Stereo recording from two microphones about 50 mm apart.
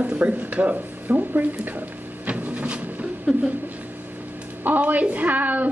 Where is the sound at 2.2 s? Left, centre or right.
Right.